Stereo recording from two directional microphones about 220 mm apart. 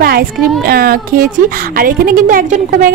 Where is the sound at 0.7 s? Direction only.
45° right (ahead or behind).